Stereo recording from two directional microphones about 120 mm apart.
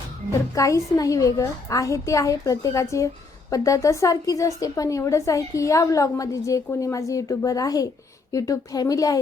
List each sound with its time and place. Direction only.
0.5 s a woman's voice: 30° left (ahead or behind)